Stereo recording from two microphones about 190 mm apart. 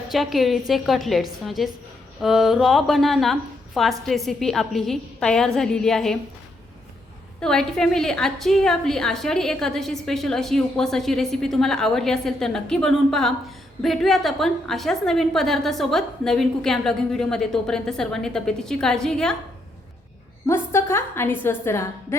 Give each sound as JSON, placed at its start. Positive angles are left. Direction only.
{"t": 0.1, "sound": "a woman's voice", "side_deg": 0}
{"t": 7.4, "sound": "a woman's voice", "side_deg": 5}
{"t": 20.5, "sound": "a woman's voice", "side_deg": 15}